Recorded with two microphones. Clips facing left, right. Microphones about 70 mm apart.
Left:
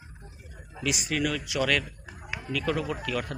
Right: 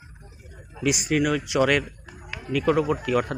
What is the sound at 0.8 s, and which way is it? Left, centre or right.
Speech, centre.